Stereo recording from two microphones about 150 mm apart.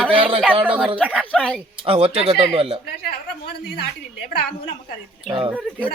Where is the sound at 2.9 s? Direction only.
90° left.